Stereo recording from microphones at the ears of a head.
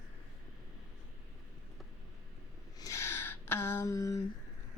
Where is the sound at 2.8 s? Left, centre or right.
Left.